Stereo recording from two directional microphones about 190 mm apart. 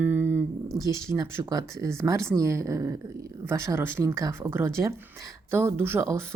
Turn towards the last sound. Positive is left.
turn(degrees=-15)  # may be behind; listen again after turning